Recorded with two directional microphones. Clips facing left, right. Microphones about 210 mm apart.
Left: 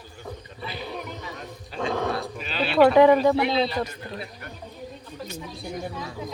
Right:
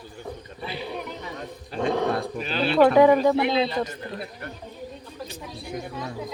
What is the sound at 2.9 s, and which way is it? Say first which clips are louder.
Speech: even; 10° right (ahead or behind).